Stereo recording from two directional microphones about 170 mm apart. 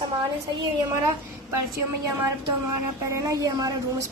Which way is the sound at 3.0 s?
20° right (ahead or behind).